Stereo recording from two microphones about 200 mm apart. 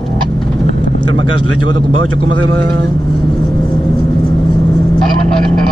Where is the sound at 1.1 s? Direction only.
90° right.